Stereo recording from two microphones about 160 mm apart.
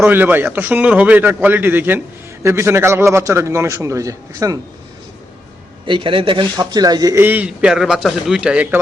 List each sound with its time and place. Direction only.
0.0 s speech: 10° right (ahead or behind)
5.8 s speech: 30° right (ahead or behind); by 8.8 s 5° right (ahead or behind)